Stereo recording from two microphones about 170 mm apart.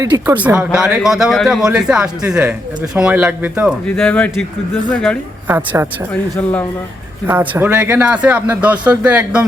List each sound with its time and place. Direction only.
0.0 s speech: 15° right (ahead or behind)
3.8 s speech: 5° left (ahead or behind)
5.5 s speech: 15° right (ahead or behind)
6.3 s speech: 10° left (ahead or behind)
7.3 s speech: 10° right (ahead or behind)